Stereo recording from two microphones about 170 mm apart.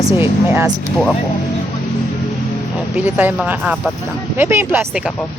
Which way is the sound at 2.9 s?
10° right (ahead or behind).